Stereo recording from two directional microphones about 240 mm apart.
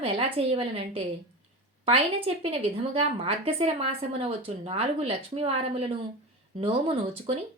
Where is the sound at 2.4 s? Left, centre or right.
Right.